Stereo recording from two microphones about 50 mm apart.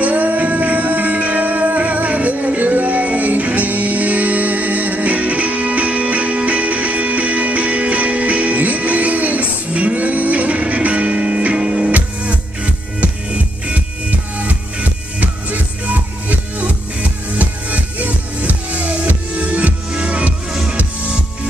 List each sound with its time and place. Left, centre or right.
0.0 s music: right
14.5 s music: right